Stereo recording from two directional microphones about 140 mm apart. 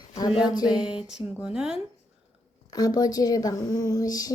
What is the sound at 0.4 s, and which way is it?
Speech, 30° left (ahead or behind).